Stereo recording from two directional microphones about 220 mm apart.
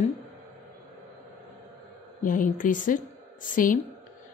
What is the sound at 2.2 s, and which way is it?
A woman's voice, 35° left (ahead or behind).